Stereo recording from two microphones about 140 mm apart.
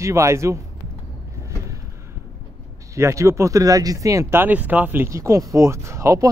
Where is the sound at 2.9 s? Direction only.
20° right (ahead or behind).